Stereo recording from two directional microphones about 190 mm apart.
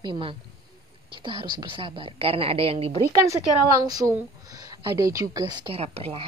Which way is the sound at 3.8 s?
20° right (ahead or behind).